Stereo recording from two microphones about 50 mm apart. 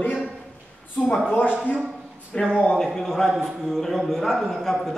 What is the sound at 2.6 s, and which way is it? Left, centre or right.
A man's voice, centre.